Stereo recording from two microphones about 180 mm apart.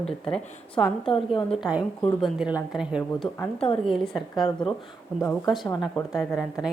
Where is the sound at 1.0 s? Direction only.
30° left (ahead or behind).